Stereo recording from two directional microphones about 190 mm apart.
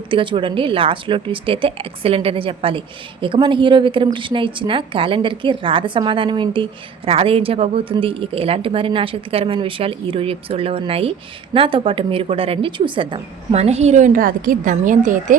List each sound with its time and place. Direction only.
0.1 s a woman's voice: 25° right (ahead or behind); by 15.4 s 45° right (ahead or behind)